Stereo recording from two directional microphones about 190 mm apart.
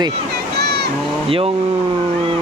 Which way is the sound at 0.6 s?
60° right (ahead or behind).